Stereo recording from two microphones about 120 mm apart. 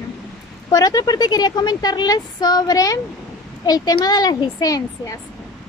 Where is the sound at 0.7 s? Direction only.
30° left (ahead or behind).